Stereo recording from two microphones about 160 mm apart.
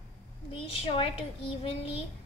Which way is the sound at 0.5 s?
35° left (ahead or behind).